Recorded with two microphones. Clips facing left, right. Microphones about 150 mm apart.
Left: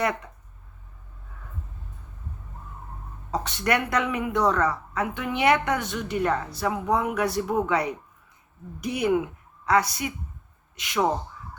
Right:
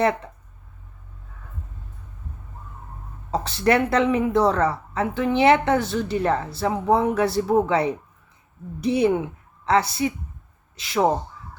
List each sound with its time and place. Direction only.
0.0 s speech: 30° right (ahead or behind)
3.3 s a woman's voice: 30° right (ahead or behind)